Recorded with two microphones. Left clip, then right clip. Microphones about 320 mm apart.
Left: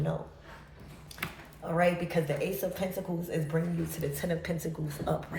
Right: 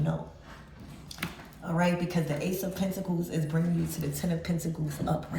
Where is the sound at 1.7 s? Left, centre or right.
Centre.